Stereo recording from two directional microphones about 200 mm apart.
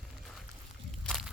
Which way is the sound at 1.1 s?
Centre (ahead or behind).